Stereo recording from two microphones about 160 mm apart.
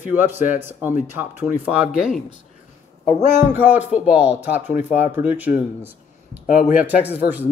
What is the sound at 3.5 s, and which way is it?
A man's voice, 10° right (ahead or behind).